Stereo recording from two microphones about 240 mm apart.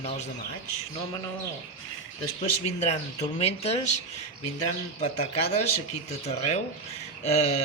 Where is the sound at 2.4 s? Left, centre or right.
Left.